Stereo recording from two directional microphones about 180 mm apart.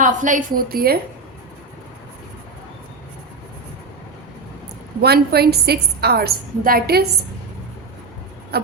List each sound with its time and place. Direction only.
0.0 s a woman's voice: 45° right (ahead or behind)
4.9 s a woman's voice: 60° right (ahead or behind)
8.5 s a sound: 65° right (ahead or behind)